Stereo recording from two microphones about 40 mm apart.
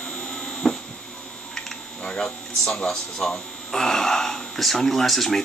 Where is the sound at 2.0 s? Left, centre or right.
Centre.